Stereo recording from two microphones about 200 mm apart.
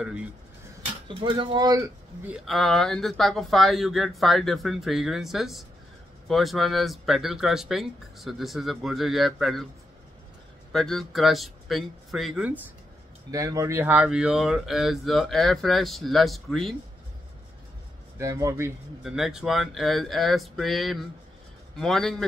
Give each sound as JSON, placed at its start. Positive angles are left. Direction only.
{"t": 0.0, "sound": "speech", "side_deg": -5}
{"t": 1.0, "sound": "speech", "side_deg": -25}
{"t": 2.2, "sound": "speech", "side_deg": -5}
{"t": 10.7, "sound": "speech", "side_deg": 0}
{"t": 13.3, "sound": "speech", "side_deg": -15}
{"t": 18.1, "sound": "speech", "side_deg": -15}
{"t": 19.1, "sound": "speech", "side_deg": 0}